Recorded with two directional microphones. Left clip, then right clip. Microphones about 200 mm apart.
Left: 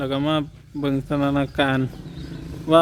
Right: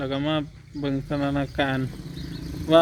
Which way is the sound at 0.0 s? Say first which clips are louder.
Left 3 dB; 15° left (ahead or behind).